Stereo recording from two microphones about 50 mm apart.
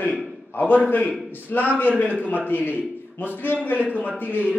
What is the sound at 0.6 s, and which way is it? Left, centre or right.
A man's voice, left.